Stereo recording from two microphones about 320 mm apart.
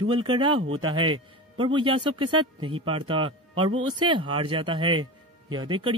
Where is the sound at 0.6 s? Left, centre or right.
Right.